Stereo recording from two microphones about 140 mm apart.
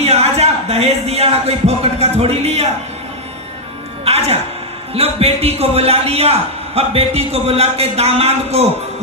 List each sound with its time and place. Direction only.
0.0 s speech: 50° right (ahead or behind)
4.0 s music: 45° right (ahead or behind)
4.9 s speech: 45° right (ahead or behind)